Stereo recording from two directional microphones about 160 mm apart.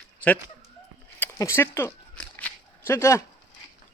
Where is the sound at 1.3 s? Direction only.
15° left (ahead or behind).